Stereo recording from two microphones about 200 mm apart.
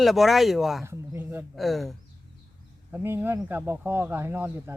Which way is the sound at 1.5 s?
Centre (ahead or behind).